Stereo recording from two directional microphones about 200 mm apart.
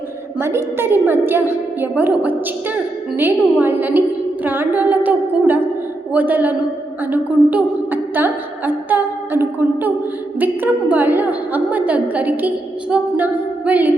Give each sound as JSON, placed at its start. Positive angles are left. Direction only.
{"t": 0.3, "sound": "a woman's voice", "side_deg": -10}